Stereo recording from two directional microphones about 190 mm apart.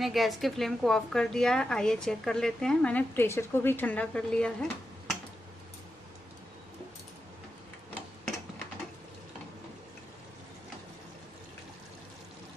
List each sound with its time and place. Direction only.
0.0 s a woman's voice: centre (ahead or behind)